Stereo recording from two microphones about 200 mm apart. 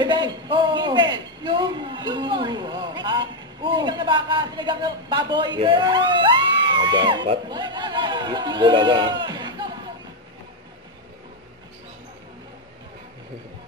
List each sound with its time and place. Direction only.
0.0 s a man's voice: 25° right (ahead or behind)